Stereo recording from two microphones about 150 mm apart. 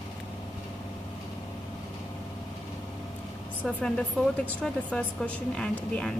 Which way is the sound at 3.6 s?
Centre (ahead or behind).